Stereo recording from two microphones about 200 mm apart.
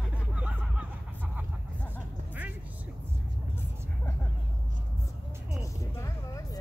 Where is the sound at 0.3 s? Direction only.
5° right (ahead or behind).